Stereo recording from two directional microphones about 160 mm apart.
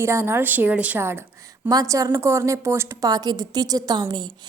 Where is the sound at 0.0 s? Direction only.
15° right (ahead or behind).